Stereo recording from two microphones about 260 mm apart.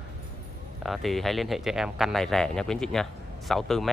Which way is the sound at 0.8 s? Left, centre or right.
Centre.